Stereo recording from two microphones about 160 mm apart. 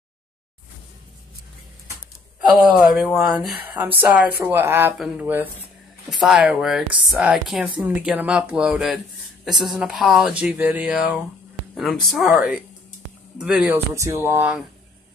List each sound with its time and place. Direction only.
2.5 s speech: 5° right (ahead or behind)
4.9 s speech: centre (ahead or behind)
5.2 s speech: 10° right (ahead or behind)
6.0 s speech: centre (ahead or behind)
13.9 s speech: 20° right (ahead or behind)